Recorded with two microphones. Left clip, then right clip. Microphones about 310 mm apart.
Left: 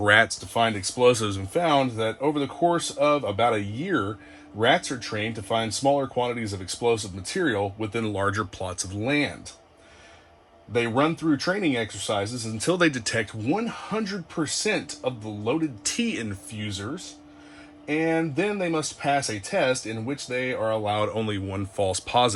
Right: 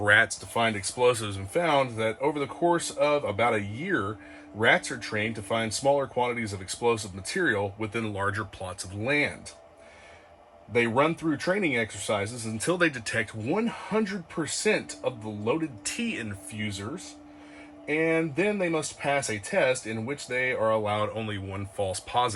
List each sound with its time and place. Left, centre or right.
0.0 s speech: centre
10.8 s speech: centre
17.9 s speech: centre